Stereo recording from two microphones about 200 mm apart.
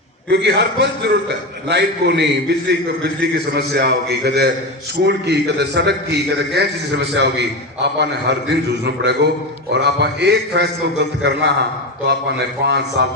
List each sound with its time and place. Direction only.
0.3 s a man's voice: 60° right (ahead or behind)
9.7 s a man's voice: 55° right (ahead or behind)